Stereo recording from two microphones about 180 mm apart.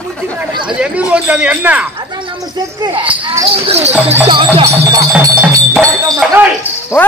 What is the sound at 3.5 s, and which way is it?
Music, 35° right (ahead or behind).